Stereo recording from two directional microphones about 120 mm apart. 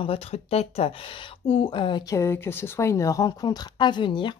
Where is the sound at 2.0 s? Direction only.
20° left (ahead or behind).